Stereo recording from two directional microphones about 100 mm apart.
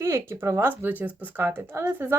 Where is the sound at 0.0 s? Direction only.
25° right (ahead or behind).